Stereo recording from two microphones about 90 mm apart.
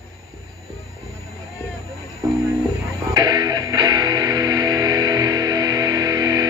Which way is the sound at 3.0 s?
40° right (ahead or behind).